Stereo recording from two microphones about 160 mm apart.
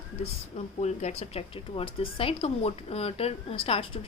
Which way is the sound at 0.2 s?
40° left (ahead or behind).